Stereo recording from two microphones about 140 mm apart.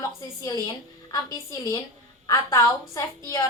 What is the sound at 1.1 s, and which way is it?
A man's voice, 25° left (ahead or behind).